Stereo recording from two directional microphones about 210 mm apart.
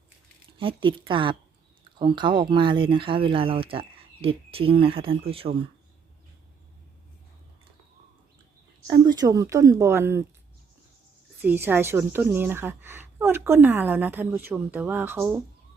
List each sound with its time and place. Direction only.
0.6 s speech: 25° right (ahead or behind)
8.9 s a woman's voice: 15° right (ahead or behind)
11.4 s a woman's voice: 10° right (ahead or behind)